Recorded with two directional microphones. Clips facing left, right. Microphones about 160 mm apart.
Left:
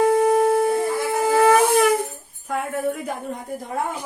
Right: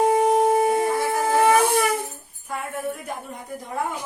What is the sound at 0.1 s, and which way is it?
Shofar, 10° right (ahead or behind).